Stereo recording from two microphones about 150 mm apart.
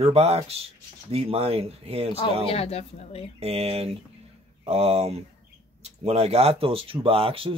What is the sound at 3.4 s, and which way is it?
Speech, 40° right (ahead or behind).